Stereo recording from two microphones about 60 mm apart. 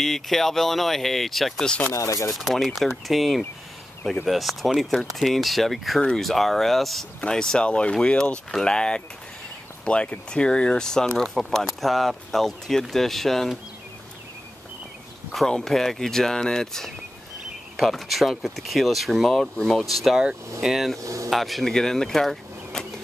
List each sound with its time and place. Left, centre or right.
0.0 s speech: centre
2.0 s speech: left
2.3 s speech: centre
4.0 s speech: centre
4.3 s speech: centre
15.3 s speech: centre
17.7 s speech: centre
21.0 s a sound: right
21.3 s speech: centre